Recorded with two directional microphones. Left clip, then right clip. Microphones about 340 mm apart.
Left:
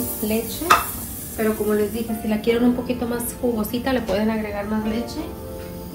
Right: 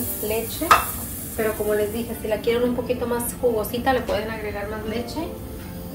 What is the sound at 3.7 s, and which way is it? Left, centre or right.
Speech, centre.